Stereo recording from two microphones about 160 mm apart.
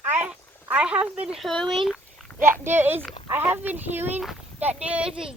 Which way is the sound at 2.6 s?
15° right (ahead or behind).